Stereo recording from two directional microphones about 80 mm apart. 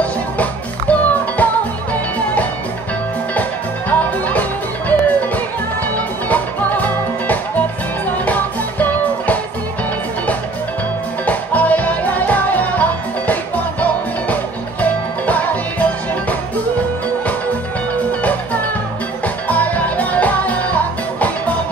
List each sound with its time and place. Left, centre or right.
0.0 s music: centre
4.3 s music: left
11.2 s music: centre
19.2 s music: centre